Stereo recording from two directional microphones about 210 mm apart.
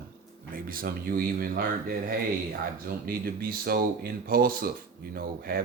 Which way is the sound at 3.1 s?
45° right (ahead or behind).